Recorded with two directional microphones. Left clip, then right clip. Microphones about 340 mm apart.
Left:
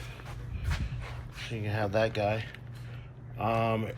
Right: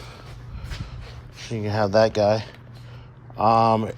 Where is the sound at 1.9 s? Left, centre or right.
Centre.